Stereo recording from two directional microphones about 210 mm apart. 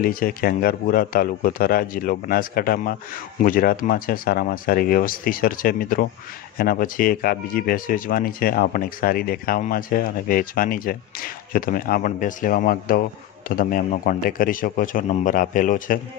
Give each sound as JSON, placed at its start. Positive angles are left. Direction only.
{"t": 0.0, "sound": "speech", "side_deg": 45}